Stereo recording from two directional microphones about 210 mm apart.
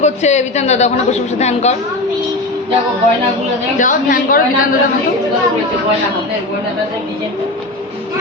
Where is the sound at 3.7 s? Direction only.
40° left (ahead or behind).